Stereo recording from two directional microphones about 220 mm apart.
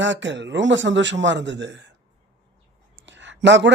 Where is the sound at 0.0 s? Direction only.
55° right (ahead or behind).